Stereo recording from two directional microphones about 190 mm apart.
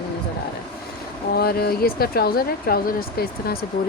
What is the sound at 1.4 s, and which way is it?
Speech, 55° left (ahead or behind).